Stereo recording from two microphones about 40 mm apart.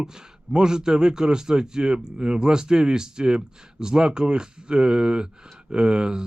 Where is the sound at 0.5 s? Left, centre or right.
Centre.